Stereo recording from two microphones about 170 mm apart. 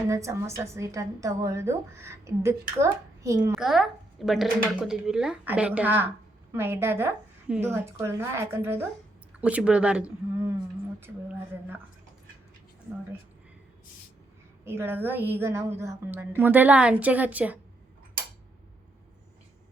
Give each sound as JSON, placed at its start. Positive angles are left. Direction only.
{"t": 0.1, "sound": "a woman's voice", "side_deg": -20}
{"t": 3.5, "sound": "a woman's voice", "side_deg": 0}
{"t": 14.6, "sound": "a woman's voice", "side_deg": -15}